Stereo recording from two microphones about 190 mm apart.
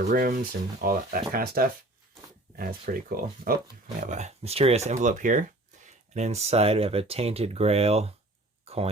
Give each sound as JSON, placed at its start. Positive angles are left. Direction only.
{"t": 0.0, "sound": "speech", "side_deg": -50}
{"t": 4.0, "sound": "speech", "side_deg": -40}
{"t": 8.6, "sound": "a sound", "side_deg": -30}